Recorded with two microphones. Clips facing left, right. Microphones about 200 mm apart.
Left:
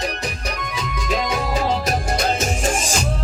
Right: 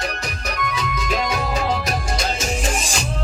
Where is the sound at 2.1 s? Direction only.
55° left (ahead or behind).